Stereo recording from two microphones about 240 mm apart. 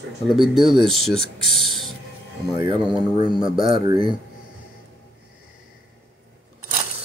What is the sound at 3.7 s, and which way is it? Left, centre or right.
Speech, right.